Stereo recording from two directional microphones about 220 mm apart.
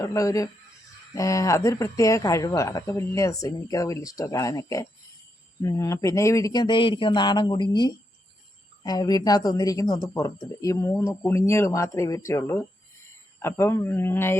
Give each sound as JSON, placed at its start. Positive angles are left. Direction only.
{"t": 0.0, "sound": "speech", "side_deg": 15}